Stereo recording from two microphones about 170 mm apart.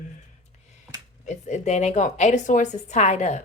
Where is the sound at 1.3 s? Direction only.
45° left (ahead or behind).